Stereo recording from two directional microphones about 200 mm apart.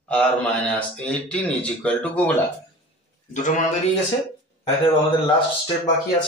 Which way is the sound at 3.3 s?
40° left (ahead or behind).